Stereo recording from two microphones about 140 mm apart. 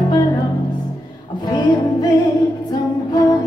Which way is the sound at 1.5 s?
30° left (ahead or behind).